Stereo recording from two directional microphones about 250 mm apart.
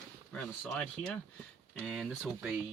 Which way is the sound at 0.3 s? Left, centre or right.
Centre.